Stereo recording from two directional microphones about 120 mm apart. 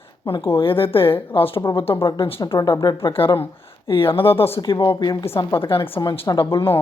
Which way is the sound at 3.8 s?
50° left (ahead or behind).